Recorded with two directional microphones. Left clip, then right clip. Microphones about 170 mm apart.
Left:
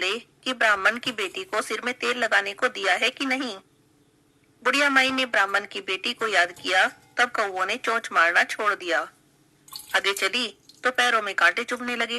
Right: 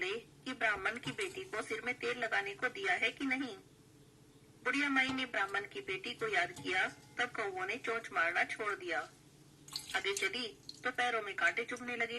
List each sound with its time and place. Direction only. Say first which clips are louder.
0.0 s a man's voice: left 13 dB; 40° left (ahead or behind)
4.6 s a man's voice: left 13 dB; 35° left (ahead or behind)